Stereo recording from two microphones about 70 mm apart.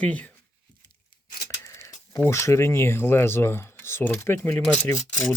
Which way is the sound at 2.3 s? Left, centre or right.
Left.